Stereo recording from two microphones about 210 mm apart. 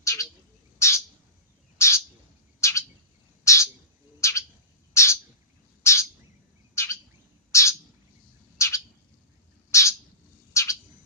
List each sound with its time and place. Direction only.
0.0 s bird: 15° left (ahead or behind)